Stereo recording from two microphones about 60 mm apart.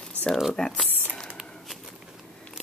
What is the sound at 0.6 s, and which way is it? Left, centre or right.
Speech, centre.